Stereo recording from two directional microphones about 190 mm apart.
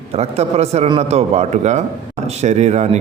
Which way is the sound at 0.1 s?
35° right (ahead or behind).